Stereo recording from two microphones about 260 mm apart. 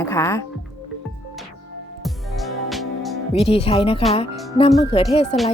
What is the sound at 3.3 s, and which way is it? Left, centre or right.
Speech, left.